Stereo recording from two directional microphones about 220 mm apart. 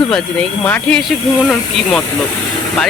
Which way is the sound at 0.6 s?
5° left (ahead or behind).